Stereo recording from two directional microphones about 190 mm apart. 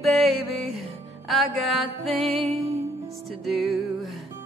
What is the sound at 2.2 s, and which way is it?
Music, 30° right (ahead or behind).